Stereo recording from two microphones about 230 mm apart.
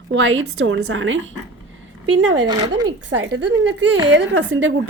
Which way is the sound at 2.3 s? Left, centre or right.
Centre.